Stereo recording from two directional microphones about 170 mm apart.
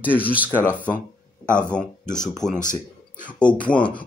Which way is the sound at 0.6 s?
10° left (ahead or behind).